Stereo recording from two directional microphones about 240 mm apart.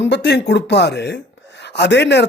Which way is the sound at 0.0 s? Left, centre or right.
Left.